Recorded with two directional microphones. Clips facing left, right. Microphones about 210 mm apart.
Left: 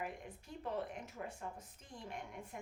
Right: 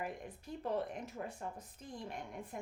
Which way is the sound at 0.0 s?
35° right (ahead or behind).